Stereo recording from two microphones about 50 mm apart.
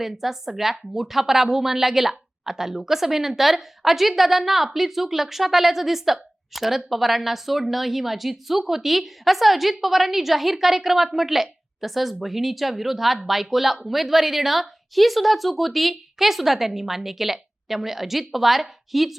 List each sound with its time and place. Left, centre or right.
0.0 s a woman's voice: centre